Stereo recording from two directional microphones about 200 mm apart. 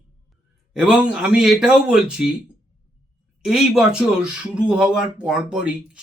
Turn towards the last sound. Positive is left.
turn(degrees=-5)  # may be behind; listen again after turning